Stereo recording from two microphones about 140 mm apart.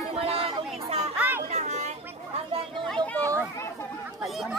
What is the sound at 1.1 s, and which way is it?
Children playing, 15° right (ahead or behind).